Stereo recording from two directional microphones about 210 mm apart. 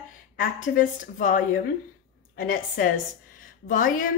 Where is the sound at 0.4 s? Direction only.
40° left (ahead or behind).